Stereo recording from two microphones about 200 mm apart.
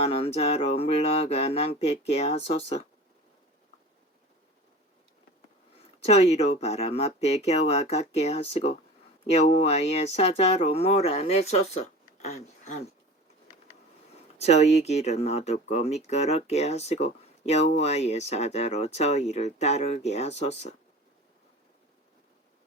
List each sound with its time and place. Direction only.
0.0 s speech: 30° left (ahead or behind)
6.0 s speech: 30° left (ahead or behind)
14.3 s speech: 30° left (ahead or behind)